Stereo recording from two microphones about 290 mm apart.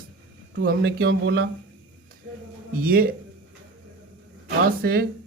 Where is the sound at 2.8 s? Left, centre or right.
Right.